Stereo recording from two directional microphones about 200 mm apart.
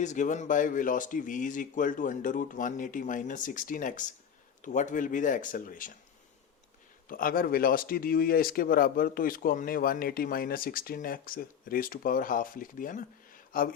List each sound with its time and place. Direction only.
0.0 s speech: 35° left (ahead or behind)
7.1 s speech: 45° left (ahead or behind)